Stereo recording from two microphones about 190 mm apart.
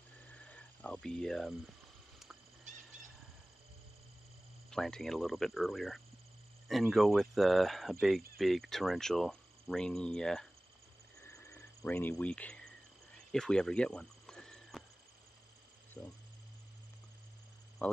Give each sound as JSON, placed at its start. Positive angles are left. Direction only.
{"t": 0.5, "sound": "cricket", "side_deg": 5}
{"t": 2.7, "sound": "bird", "side_deg": -40}
{"t": 4.6, "sound": "speech", "side_deg": 5}
{"t": 11.8, "sound": "speech", "side_deg": 10}
{"t": 13.3, "sound": "cricket", "side_deg": 5}
{"t": 16.0, "sound": "speech", "side_deg": 20}